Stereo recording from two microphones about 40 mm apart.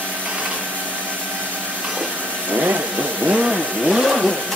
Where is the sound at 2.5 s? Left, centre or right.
Right.